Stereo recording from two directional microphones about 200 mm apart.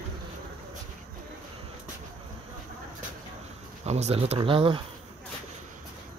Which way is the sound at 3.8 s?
35° right (ahead or behind).